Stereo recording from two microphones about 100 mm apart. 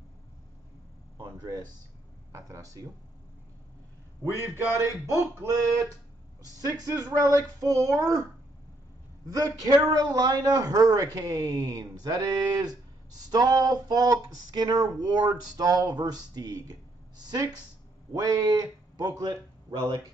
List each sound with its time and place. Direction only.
1.1 s a sound: 45° right (ahead or behind)
2.3 s a man's voice: 35° right (ahead or behind)
4.4 s a man's voice: 30° right (ahead or behind)
6.6 s a man's voice: 40° right (ahead or behind)
9.3 s a man's voice: 40° right (ahead or behind)